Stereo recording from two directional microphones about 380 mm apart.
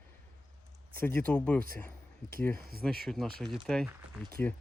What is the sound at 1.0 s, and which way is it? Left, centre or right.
Speech, centre.